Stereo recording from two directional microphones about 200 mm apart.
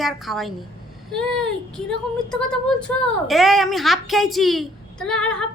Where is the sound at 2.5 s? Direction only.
5° left (ahead or behind).